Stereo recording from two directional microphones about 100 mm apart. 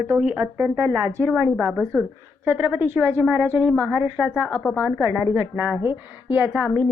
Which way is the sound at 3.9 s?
15° right (ahead or behind).